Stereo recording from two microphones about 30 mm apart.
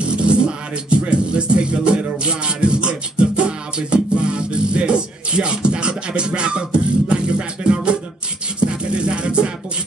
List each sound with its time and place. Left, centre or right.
0.0 s music: right